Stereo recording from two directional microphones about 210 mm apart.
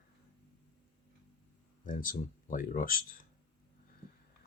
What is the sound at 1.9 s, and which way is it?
Speech, 40° left (ahead or behind).